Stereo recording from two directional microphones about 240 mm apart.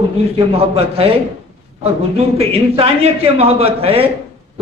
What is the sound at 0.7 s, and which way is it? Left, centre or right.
Speech, right.